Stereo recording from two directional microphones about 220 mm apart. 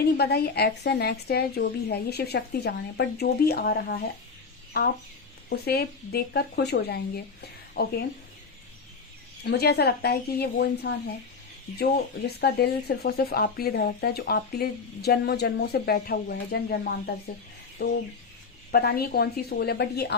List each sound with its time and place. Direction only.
0.0 s speech: 45° left (ahead or behind)
5.5 s speech: 45° left (ahead or behind)
9.4 s speech: 45° left (ahead or behind)